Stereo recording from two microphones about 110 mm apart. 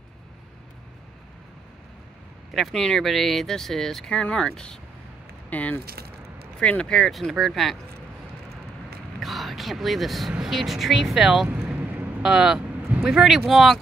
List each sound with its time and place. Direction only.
2.5 s speech: centre (ahead or behind)
9.2 s speech: centre (ahead or behind)